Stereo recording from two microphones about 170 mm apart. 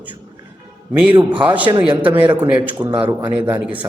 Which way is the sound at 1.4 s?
10° right (ahead or behind).